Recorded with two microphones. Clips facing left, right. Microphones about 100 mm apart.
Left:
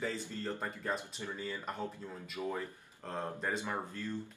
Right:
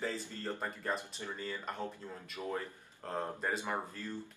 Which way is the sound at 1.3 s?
10° left (ahead or behind).